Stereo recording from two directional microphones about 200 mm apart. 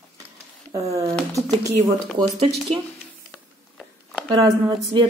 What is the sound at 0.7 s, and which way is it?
Speech, 15° right (ahead or behind).